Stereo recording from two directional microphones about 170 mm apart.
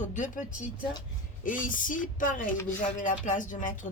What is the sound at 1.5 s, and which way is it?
Speech, 50° left (ahead or behind).